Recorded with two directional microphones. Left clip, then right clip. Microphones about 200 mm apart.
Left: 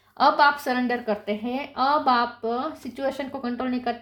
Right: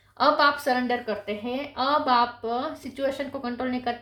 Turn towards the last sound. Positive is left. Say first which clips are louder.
# left 1 dB
turn(degrees=35)  # may be behind; listen again after turning